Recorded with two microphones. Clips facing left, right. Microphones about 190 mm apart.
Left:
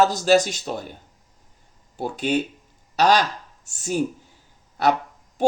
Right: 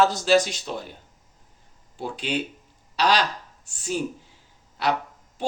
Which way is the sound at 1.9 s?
45° left (ahead or behind).